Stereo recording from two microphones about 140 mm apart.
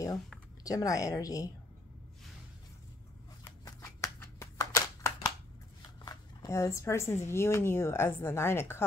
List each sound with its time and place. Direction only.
0.7 s a woman's voice: 25° left (ahead or behind)
3.4 s shuffling cards: 20° left (ahead or behind)
6.0 s a woman's voice: 25° left (ahead or behind)